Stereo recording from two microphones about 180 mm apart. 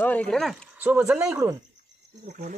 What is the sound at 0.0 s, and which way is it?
Speech, 5° left (ahead or behind).